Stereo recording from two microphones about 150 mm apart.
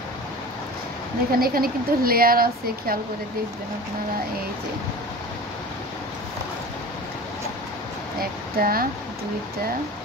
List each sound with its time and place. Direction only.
1.3 s speech: 80° right
8.2 s speech: 75° right (ahead or behind)